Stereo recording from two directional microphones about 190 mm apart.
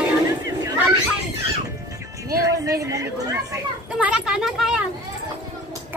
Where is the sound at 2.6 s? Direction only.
15° right (ahead or behind).